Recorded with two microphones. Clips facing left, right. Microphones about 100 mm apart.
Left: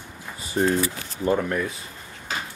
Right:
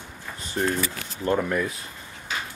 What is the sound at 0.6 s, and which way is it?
Speech, 15° left (ahead or behind).